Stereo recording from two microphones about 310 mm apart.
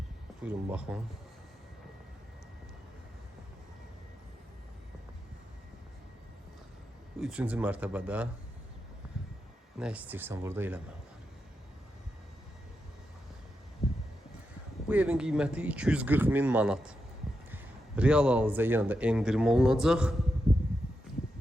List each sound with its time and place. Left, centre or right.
0.4 s a man's voice: centre
7.2 s a man's voice: centre
9.7 s speech: centre
13.8 s a sound: centre
14.8 s a man's voice: centre